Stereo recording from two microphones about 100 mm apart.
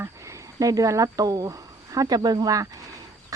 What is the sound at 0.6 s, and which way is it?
Speech, 35° right (ahead or behind).